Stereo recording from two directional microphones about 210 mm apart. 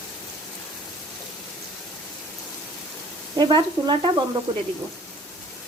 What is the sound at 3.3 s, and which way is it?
Speech, 20° right (ahead or behind).